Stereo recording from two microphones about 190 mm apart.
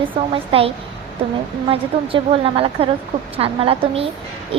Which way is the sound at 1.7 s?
30° right (ahead or behind).